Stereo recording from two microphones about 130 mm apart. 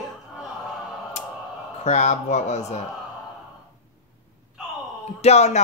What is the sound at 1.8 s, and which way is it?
Speech, 60° left (ahead or behind).